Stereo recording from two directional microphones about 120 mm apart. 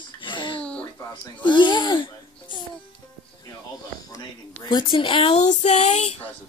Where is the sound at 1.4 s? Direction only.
40° left (ahead or behind).